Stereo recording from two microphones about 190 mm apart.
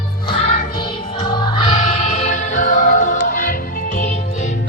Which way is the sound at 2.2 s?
40° left (ahead or behind).